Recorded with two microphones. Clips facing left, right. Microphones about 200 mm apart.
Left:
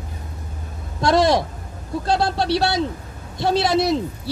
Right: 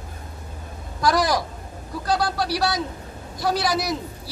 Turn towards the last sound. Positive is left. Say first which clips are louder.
# left 5 dB
turn(degrees=25)  # may be behind; listen again after turning